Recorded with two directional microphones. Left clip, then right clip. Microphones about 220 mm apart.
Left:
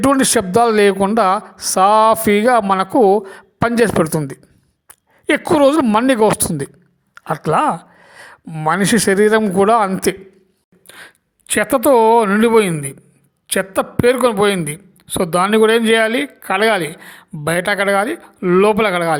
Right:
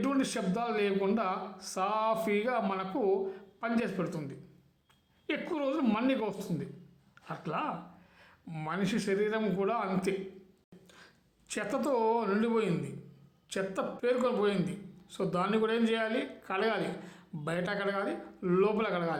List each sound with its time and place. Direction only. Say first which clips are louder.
0.0 s speech: left 18 dB; 45° left (ahead or behind)